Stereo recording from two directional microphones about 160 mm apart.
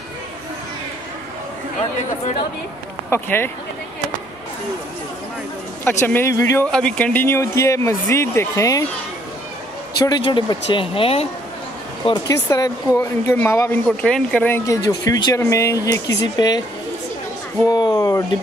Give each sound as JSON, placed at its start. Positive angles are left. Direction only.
{"t": 3.1, "sound": "speech", "side_deg": 15}
{"t": 5.9, "sound": "speech", "side_deg": 15}
{"t": 6.7, "sound": "speech", "side_deg": 5}
{"t": 9.9, "sound": "speech", "side_deg": 25}
{"t": 12.4, "sound": "speech", "side_deg": 20}
{"t": 14.7, "sound": "speech", "side_deg": 20}
{"t": 17.6, "sound": "speech", "side_deg": 25}